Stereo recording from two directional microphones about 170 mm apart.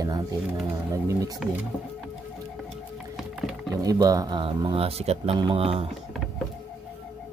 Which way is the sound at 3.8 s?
20° right (ahead or behind).